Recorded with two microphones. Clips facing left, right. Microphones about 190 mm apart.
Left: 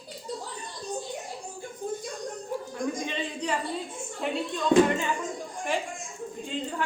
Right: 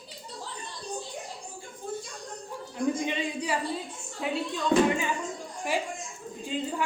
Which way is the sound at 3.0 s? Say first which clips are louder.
Right 1 dB; 15° right (ahead or behind).